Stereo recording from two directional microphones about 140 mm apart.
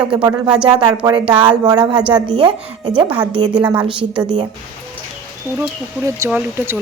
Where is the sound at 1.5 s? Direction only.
30° right (ahead or behind).